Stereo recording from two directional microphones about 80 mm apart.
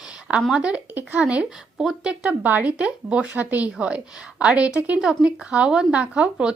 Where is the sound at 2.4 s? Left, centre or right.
Right.